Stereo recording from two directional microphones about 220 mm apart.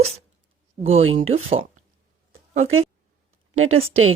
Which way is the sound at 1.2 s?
30° right (ahead or behind).